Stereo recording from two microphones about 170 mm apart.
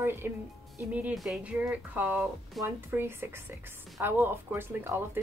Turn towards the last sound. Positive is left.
turn(degrees=-15)  # may be behind; listen again after turning